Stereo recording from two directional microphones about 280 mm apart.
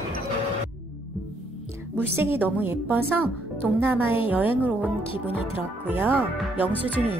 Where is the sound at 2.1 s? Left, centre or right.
Centre.